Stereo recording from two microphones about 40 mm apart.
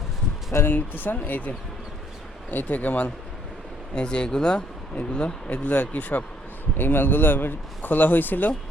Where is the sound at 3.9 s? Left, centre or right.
Left.